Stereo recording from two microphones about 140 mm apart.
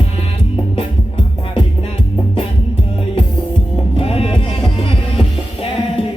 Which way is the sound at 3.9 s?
40° left (ahead or behind).